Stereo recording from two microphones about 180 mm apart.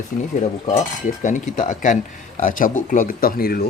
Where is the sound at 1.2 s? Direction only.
45° left (ahead or behind).